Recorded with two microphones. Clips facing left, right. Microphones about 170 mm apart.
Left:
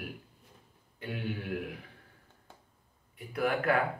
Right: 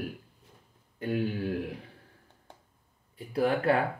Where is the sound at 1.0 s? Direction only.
35° right (ahead or behind).